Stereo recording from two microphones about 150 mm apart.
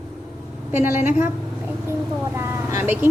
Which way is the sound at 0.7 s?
15° right (ahead or behind).